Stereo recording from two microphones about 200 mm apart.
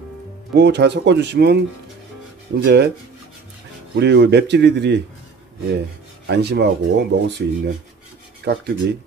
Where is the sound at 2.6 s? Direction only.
60° right (ahead or behind).